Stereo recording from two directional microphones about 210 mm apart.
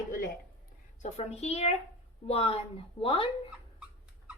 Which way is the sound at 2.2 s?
30° left (ahead or behind).